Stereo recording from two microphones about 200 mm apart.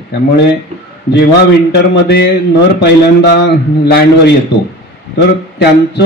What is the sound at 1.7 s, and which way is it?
Speech, 55° left (ahead or behind).